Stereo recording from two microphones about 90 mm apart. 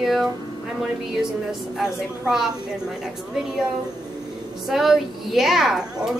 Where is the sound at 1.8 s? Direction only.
5° right (ahead or behind).